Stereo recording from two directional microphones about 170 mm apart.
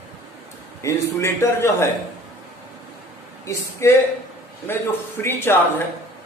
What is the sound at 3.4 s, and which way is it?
A man's voice, 15° left (ahead or behind).